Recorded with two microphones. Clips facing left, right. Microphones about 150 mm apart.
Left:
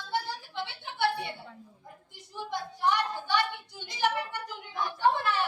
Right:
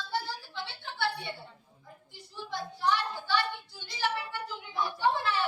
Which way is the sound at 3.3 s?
20° left (ahead or behind).